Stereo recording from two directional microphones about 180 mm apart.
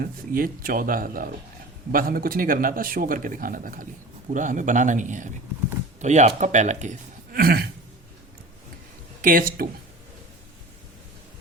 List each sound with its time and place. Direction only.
0.0 s speech: 55° right (ahead or behind)
7.3 s throat clearing: 55° right (ahead or behind)
9.2 s speech: 50° right (ahead or behind)